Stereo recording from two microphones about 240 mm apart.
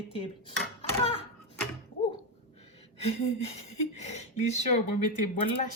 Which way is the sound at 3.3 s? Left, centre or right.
Left.